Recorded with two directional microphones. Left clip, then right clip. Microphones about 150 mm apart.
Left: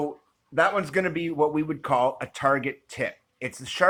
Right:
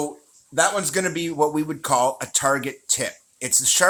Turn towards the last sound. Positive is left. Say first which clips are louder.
# right 4 dB
turn(degrees=-25)  # may be behind; listen again after turning